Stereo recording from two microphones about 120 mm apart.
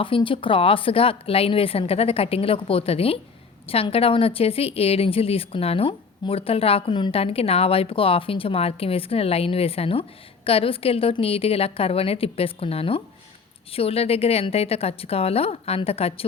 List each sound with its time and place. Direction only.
0.0 s a woman's voice: 45° left (ahead or behind)